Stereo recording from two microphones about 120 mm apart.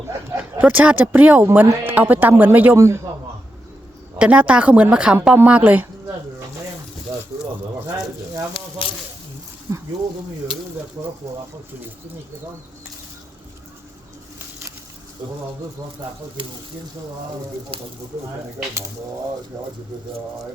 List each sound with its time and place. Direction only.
0.6 s a woman's voice: 15° right (ahead or behind)
4.2 s a woman's voice: 10° right (ahead or behind)
9.7 s a sound: 30° right (ahead or behind)
17.7 s speech: 50° right (ahead or behind)
19.5 s speech: 35° right (ahead or behind)